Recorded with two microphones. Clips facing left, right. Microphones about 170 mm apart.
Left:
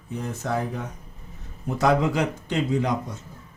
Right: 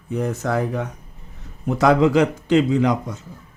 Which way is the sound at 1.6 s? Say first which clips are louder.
Right 5 dB; 90° right.